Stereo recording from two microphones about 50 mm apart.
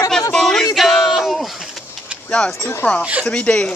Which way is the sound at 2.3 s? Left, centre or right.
Left.